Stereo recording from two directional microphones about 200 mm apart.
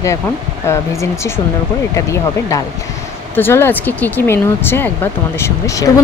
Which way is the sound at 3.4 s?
10° left (ahead or behind).